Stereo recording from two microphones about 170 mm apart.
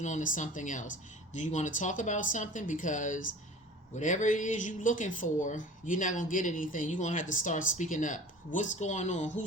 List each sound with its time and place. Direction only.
0.0 s speech: 50° left (ahead or behind)